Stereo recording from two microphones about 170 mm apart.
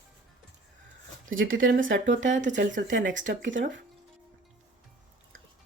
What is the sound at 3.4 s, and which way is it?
Speech, 90° right.